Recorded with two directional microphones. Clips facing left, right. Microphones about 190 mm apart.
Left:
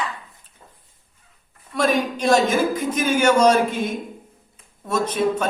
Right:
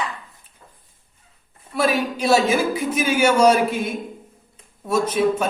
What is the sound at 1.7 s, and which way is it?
A man's voice, 5° right (ahead or behind).